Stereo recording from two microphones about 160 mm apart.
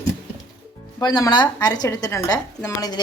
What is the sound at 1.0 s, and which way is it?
A woman's voice, 25° left (ahead or behind).